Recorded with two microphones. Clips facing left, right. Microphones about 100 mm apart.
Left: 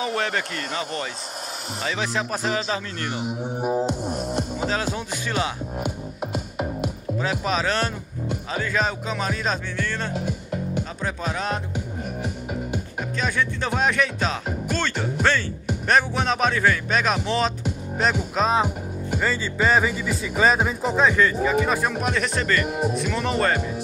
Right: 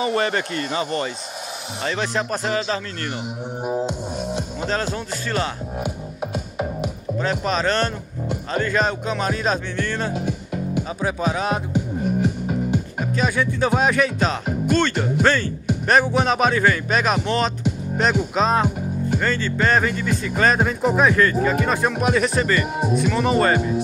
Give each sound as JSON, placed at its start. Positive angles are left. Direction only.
{"t": 0.0, "sound": "speech", "side_deg": 0}
{"t": 4.6, "sound": "speech", "side_deg": 5}
{"t": 5.8, "sound": "music", "side_deg": 0}
{"t": 7.2, "sound": "speech", "side_deg": 5}
{"t": 13.1, "sound": "speech", "side_deg": -5}